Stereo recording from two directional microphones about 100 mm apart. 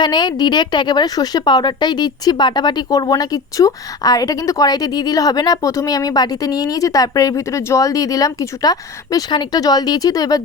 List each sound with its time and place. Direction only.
0.0 s a woman's voice: 45° left (ahead or behind)